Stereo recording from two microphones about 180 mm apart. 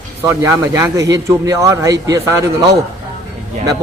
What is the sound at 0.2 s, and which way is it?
A man's voice, 15° right (ahead or behind).